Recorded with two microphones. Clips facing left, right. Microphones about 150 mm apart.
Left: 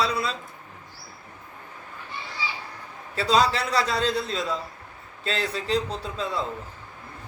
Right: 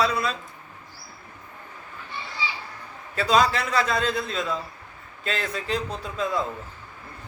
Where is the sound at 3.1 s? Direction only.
30° left (ahead or behind).